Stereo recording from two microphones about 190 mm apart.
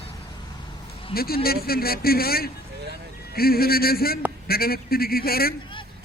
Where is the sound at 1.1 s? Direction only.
55° left (ahead or behind).